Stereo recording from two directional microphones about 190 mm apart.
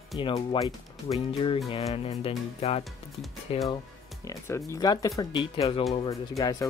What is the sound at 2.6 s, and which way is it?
Speech, 35° left (ahead or behind).